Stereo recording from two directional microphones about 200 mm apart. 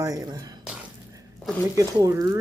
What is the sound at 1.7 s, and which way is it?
Speech, 15° right (ahead or behind).